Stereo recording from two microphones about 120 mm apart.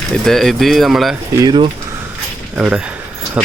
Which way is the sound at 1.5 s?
45° right (ahead or behind).